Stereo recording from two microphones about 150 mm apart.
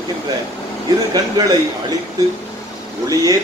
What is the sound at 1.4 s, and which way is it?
Speech, 25° right (ahead or behind).